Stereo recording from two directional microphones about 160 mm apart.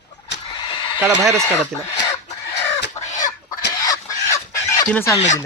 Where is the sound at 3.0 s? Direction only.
50° left (ahead or behind).